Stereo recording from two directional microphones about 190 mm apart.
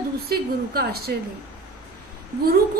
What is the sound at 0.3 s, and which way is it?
Speech, 55° right (ahead or behind).